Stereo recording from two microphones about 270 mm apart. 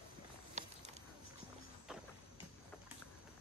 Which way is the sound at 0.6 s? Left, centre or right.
Right.